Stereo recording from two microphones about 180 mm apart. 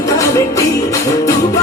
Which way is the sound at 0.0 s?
15° left (ahead or behind).